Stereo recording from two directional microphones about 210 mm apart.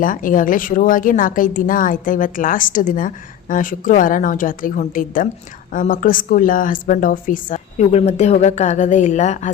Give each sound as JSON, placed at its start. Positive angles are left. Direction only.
{"t": 0.0, "sound": "a woman's voice", "side_deg": 40}